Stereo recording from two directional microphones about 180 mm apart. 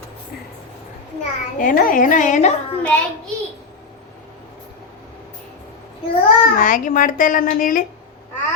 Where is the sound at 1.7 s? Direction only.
50° left (ahead or behind).